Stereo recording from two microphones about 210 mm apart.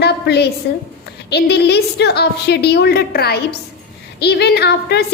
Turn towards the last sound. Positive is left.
turn(degrees=50)  # may be behind; listen again after turning